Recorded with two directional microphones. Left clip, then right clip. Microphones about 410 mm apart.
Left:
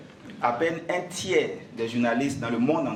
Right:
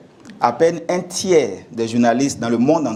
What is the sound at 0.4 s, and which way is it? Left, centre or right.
A man's voice, right.